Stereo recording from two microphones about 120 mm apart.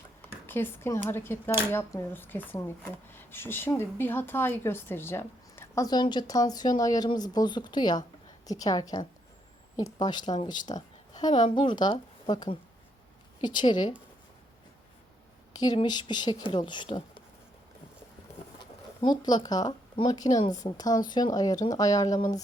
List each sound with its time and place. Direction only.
0.2 s a woman's voice: 15° left (ahead or behind); by 13.9 s 40° left (ahead or behind)
15.5 s a woman's voice: 35° left (ahead or behind)
18.6 s a woman's voice: 35° left (ahead or behind)